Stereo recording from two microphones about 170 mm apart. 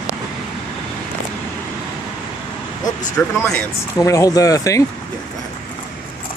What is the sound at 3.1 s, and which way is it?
Speech, 10° left (ahead or behind).